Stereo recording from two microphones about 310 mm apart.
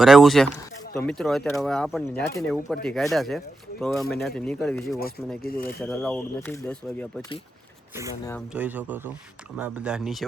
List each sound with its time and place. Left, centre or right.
0.0 s speech: centre
5.4 s speech: left
5.8 s speech: centre
8.5 s speech: centre